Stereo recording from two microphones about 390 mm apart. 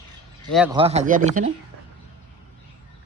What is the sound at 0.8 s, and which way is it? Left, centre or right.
Speech, centre.